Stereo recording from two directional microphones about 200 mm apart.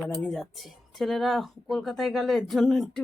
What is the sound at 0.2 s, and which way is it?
Speech, centre (ahead or behind).